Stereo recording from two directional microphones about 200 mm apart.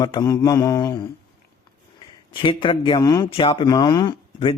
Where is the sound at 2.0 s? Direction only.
25° left (ahead or behind).